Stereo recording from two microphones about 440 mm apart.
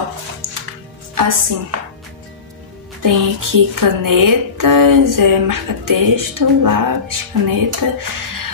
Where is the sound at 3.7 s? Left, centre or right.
Right.